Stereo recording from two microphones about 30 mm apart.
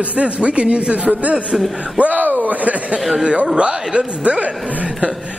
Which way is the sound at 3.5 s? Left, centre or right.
Right.